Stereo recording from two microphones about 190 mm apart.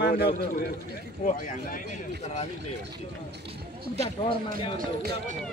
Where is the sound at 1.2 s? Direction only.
45° left (ahead or behind).